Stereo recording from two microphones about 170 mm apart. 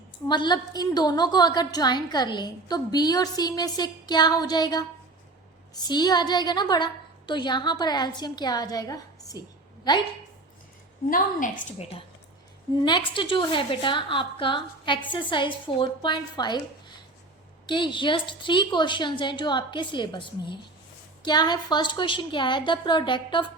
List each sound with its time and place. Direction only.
0.3 s a woman's voice: 25° left (ahead or behind)
11.1 s a woman's voice: 50° left (ahead or behind)
12.8 s a woman's voice: 25° left (ahead or behind)